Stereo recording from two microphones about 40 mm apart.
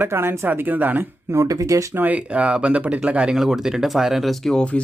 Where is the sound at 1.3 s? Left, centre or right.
Right.